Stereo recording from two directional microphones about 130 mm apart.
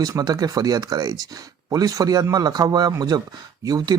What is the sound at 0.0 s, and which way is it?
Speech, 30° right (ahead or behind).